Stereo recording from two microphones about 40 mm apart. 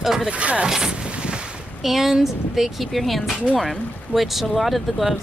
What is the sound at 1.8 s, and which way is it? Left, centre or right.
Speech, centre.